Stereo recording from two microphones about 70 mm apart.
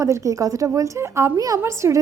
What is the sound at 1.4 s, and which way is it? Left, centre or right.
Speech, right.